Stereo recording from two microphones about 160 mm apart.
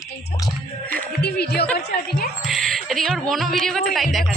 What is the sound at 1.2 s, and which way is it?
Music, 85° left.